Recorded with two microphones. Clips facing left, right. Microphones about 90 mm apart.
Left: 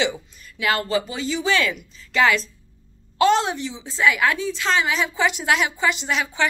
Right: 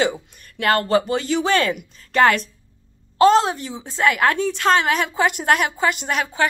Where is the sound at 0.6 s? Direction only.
50° right (ahead or behind).